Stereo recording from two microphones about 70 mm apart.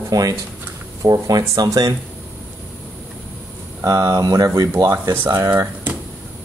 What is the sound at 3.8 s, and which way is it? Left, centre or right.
Speech, right.